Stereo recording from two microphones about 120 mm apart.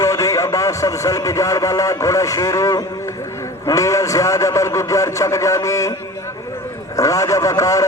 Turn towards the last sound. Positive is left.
turn(degrees=25)  # may be behind; listen again after turning